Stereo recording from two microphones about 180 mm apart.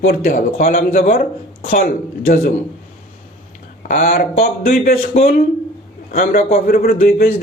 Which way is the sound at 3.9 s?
50° left (ahead or behind).